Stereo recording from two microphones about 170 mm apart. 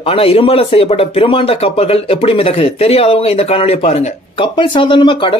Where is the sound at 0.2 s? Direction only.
35° left (ahead or behind).